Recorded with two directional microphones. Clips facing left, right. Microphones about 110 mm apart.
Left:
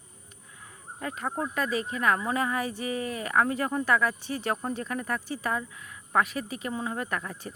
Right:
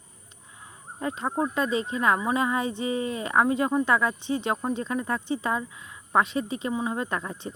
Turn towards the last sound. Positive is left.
turn(degrees=-25)  # may be behind; listen again after turning